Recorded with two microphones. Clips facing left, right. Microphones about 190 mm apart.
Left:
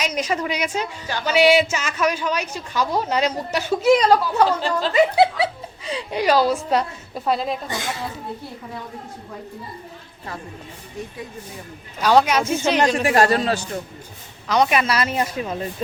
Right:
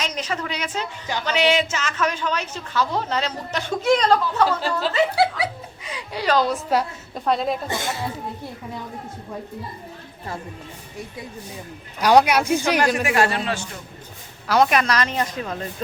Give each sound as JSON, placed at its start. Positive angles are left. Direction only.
{"t": 0.0, "sound": "a woman's voice", "side_deg": 10}
{"t": 4.9, "sound": "snicker", "side_deg": 20}
{"t": 6.1, "sound": "a woman's voice", "side_deg": 10}
{"t": 11.9, "sound": "speech", "side_deg": -10}
{"t": 13.0, "sound": "a man's voice", "side_deg": 40}
{"t": 14.4, "sound": "a woman's voice", "side_deg": -5}